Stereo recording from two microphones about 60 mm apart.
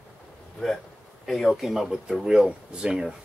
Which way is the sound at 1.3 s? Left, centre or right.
Centre.